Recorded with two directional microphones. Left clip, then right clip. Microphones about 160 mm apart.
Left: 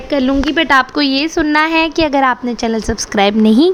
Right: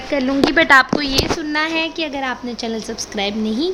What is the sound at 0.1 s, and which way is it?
Speech, 50° left (ahead or behind).